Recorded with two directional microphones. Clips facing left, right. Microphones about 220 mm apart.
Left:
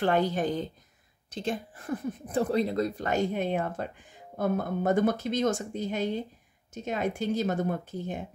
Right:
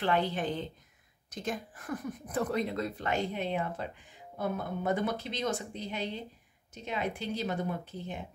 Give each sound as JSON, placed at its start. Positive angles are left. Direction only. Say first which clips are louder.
{"t": 0.0, "sound": "speech", "louder": "left 4 dB", "side_deg": 45}
{"t": 1.3, "sound": "a woman's voice", "louder": "left 4 dB", "side_deg": 30}